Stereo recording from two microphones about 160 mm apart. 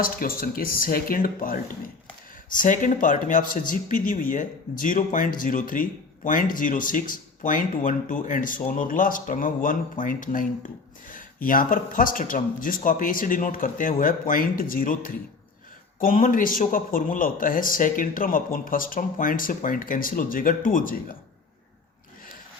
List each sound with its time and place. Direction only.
0.0 s speech: 65° left (ahead or behind)